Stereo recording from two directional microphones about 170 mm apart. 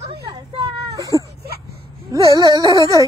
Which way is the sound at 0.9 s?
20° right (ahead or behind).